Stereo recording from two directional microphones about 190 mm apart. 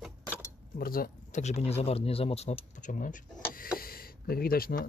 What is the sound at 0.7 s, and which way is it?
Speech, 50° left (ahead or behind).